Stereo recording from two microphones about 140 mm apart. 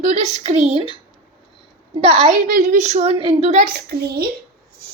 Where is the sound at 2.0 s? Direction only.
45° right (ahead or behind).